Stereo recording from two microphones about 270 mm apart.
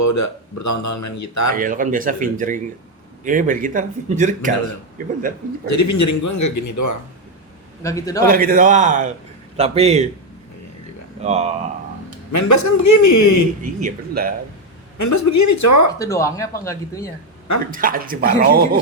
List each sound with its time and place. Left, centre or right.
0.0 s speech: left
1.5 s speech: right
5.6 s speech: left
7.8 s speech: centre
8.2 s speech: right
11.2 s speech: right
12.3 s speech: left
13.7 s speech: right
14.9 s speech: left
16.0 s speech: centre
17.7 s speech: right